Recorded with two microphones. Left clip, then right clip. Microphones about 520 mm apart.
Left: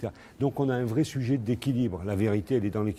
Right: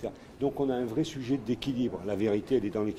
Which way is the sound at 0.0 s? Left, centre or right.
Left.